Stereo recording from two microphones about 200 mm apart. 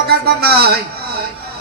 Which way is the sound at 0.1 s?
50° right (ahead or behind).